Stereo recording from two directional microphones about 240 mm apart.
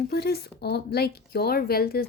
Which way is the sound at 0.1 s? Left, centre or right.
Left.